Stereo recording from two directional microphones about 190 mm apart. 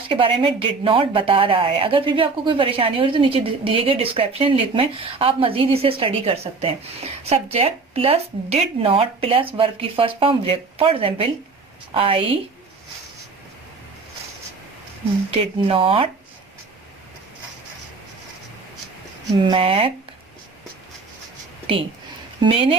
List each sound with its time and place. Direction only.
0.1 s speech: 25° right (ahead or behind)
15.3 s speech: 30° right (ahead or behind)
19.4 s speech: 25° right (ahead or behind)
22.4 s speech: 30° right (ahead or behind)